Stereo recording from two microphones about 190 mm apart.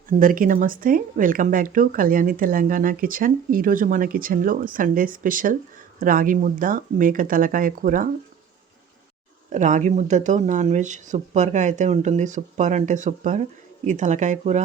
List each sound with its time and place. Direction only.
0.2 s speech: 45° right (ahead or behind)
9.5 s speech: 40° right (ahead or behind)